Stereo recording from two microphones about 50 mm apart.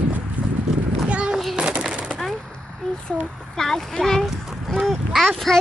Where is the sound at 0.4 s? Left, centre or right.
Right.